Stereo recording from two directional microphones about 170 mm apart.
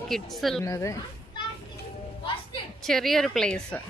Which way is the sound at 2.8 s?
Centre (ahead or behind).